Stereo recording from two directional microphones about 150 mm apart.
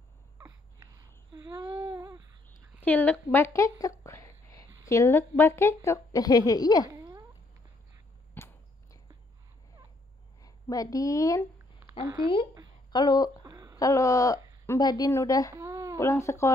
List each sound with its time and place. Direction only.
0.4 s babbling: 20° right (ahead or behind)
2.8 s speech: 10° left (ahead or behind)
4.0 s a sound: 20° left (ahead or behind)
4.8 s a woman's voice: 20° left (ahead or behind)
7.0 s cat: 25° right (ahead or behind)
8.4 s a sound: 15° left (ahead or behind)
10.4 s a woman's voice: 25° left (ahead or behind)
12.9 s a woman's voice: 30° left (ahead or behind)
13.4 s a sound: 25° right (ahead or behind)
13.7 s a woman's voice: 20° left (ahead or behind)
15.5 s a sound: 20° right (ahead or behind)
16.0 s a woman's voice: 20° left (ahead or behind)